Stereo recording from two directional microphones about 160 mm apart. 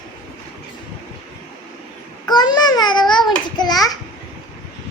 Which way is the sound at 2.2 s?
25° left (ahead or behind).